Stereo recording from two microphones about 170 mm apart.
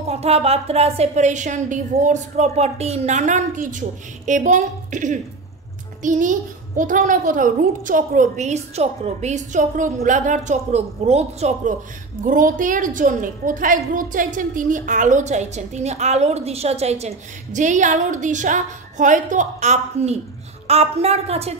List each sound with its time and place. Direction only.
0.1 s a woman's voice: 35° right (ahead or behind)
12.3 s a woman's voice: 50° right (ahead or behind)